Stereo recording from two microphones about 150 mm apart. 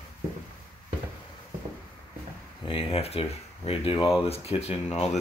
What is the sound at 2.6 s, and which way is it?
Speech, 40° left (ahead or behind).